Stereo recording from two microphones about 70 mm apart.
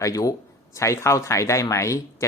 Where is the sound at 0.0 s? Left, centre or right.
Left.